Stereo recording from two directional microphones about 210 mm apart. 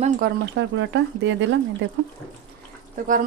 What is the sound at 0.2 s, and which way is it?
Speech, 60° right (ahead or behind).